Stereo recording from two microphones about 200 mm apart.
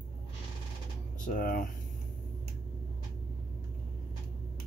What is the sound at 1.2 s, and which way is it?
Speech, 45° left (ahead or behind).